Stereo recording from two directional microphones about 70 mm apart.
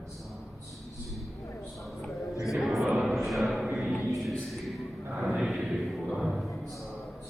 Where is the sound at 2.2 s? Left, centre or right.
Left.